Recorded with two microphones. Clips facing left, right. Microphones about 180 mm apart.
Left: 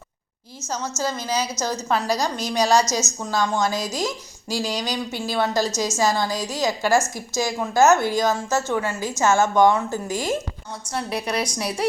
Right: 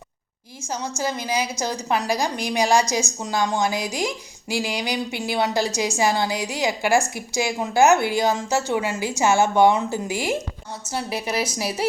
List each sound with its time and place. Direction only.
0.7 s a woman's voice: 15° right (ahead or behind)